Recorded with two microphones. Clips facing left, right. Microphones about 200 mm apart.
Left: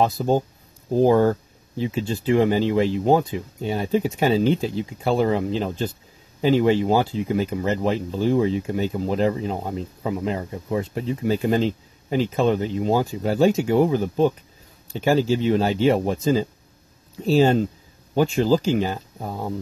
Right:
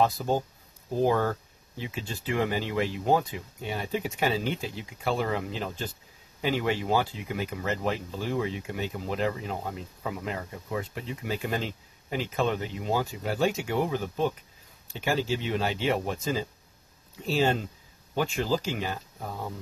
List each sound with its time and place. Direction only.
1.0 s speech: 35° left (ahead or behind)